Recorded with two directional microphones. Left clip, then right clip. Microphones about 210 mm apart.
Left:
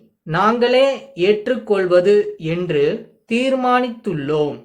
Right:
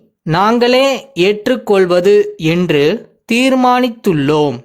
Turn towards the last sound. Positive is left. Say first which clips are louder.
# right 7 dB
turn(degrees=-55)  # may be behind; listen again after turning